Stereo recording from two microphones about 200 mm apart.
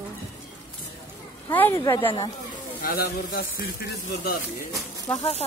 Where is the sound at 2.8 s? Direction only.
45° left (ahead or behind).